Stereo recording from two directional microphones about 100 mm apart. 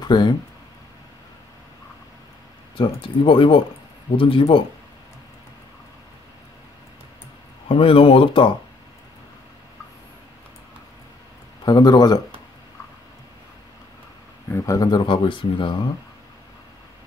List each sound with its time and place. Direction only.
0.0 s speech: 45° left (ahead or behind)
2.8 s speech: 60° left (ahead or behind)
7.6 s speech: 65° left (ahead or behind)
11.6 s speech: 45° left (ahead or behind)
14.5 s a man's voice: 30° left (ahead or behind)
15.0 s speech: 55° left (ahead or behind)